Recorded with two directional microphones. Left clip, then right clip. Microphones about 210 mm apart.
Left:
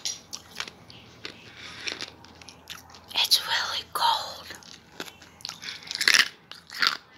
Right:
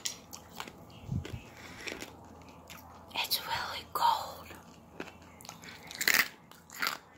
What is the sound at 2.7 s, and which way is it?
Whispering, centre (ahead or behind).